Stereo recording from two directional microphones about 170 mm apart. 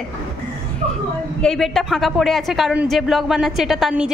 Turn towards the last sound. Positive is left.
turn(degrees=-5)  # may be behind; listen again after turning